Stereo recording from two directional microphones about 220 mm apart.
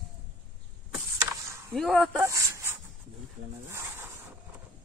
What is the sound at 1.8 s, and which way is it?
Speech, centre (ahead or behind).